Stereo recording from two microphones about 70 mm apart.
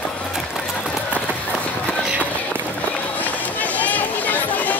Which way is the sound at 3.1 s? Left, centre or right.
Left.